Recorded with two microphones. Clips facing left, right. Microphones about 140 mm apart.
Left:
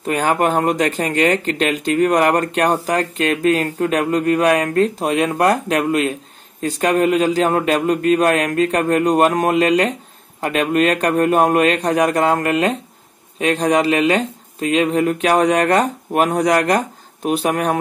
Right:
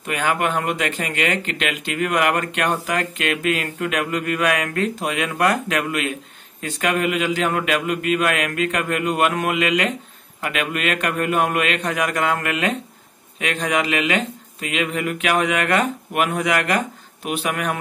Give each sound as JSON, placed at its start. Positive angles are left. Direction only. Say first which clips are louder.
{"t": 0.0, "sound": "speech", "louder": "left 5 dB", "side_deg": 35}